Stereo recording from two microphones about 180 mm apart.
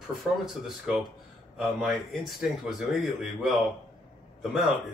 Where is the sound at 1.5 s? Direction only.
Centre (ahead or behind).